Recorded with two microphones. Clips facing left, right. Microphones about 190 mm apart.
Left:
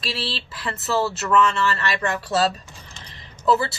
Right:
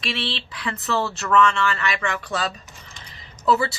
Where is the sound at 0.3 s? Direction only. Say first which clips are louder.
Right 1 dB; 5° left (ahead or behind).